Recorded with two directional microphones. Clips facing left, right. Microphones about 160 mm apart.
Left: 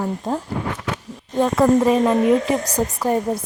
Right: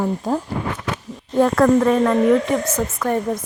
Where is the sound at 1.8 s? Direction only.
20° left (ahead or behind).